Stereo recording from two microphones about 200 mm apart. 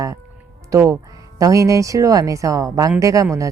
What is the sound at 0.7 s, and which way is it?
A woman's voice, 15° right (ahead or behind).